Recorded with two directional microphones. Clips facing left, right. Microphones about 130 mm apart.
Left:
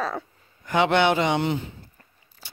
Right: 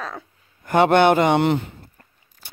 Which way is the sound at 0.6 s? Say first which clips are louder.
Right 5 dB; 50° right (ahead or behind).